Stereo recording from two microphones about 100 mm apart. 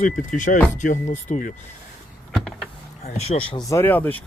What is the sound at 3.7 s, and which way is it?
Speech, 20° left (ahead or behind).